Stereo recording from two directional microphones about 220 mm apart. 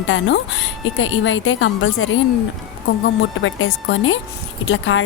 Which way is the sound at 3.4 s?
60° left (ahead or behind).